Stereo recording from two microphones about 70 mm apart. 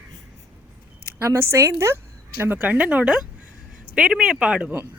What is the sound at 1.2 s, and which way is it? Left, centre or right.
Speech, right.